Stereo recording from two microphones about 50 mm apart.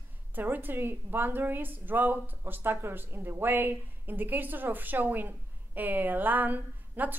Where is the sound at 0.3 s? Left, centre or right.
Right.